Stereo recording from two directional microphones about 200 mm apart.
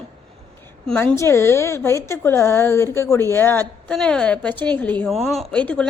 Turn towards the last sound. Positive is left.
turn(degrees=5)  # may be behind; listen again after turning